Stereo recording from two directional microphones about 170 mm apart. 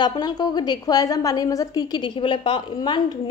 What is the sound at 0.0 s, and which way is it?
A woman's voice, 25° left (ahead or behind).